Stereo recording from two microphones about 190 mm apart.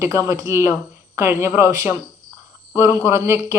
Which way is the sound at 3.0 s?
15° right (ahead or behind).